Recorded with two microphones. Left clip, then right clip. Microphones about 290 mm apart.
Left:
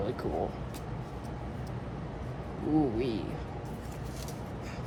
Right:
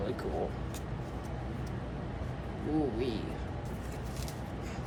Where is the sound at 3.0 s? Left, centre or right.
Left.